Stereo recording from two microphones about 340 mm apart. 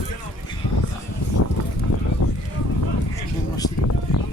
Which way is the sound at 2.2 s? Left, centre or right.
Left.